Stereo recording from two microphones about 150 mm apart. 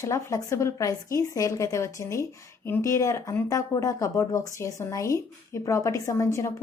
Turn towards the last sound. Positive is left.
turn(degrees=20)  # may be behind; listen again after turning